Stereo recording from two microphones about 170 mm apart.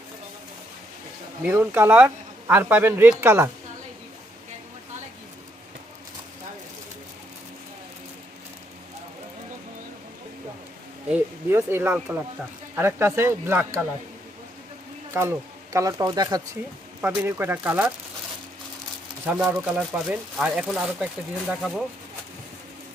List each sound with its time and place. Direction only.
1.5 s speech: 15° right (ahead or behind)
11.1 s speech: 15° right (ahead or behind)
15.1 s speech: 20° right (ahead or behind)
17.0 s speech: 10° right (ahead or behind)
19.2 s speech: 10° right (ahead or behind)